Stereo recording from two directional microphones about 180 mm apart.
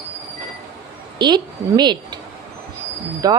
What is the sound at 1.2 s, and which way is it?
Speech, 25° right (ahead or behind).